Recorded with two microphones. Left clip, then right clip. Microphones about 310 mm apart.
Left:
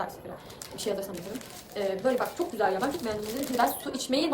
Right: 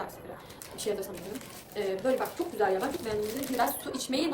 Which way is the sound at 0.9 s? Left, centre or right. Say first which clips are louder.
Left 2 dB; centre.